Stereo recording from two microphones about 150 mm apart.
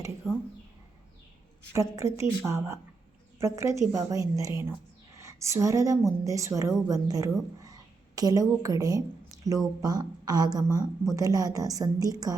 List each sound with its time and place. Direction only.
0.2 s speech: centre (ahead or behind)
1.7 s a woman's voice: 20° right (ahead or behind)